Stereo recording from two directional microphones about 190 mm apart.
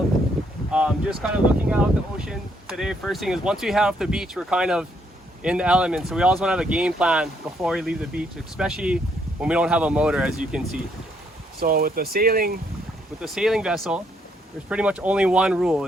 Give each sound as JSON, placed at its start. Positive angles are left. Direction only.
{"t": 0.7, "sound": "wind", "side_deg": -5}
{"t": 1.7, "sound": "speech", "side_deg": -5}
{"t": 11.6, "sound": "speech", "side_deg": -50}
{"t": 13.1, "sound": "speech", "side_deg": 0}